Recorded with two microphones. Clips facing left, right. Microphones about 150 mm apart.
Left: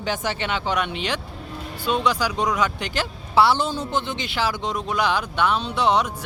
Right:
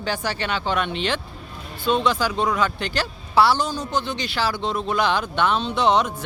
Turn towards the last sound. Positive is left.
turn(degrees=10)  # may be behind; listen again after turning